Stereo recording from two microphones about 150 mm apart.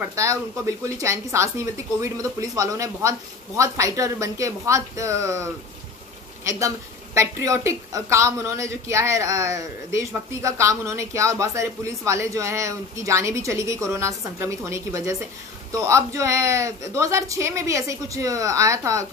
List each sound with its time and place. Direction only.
0.0 s a woman's voice: 20° right (ahead or behind)
7.2 s a woman's voice: 20° right (ahead or behind)